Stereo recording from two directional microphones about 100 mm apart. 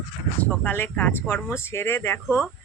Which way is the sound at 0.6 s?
20° left (ahead or behind).